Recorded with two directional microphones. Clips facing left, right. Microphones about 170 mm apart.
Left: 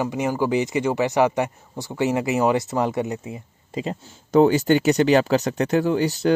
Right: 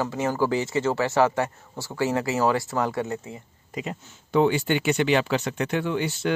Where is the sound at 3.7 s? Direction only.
35° left (ahead or behind).